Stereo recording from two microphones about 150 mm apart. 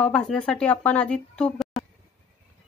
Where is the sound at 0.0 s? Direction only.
5° left (ahead or behind).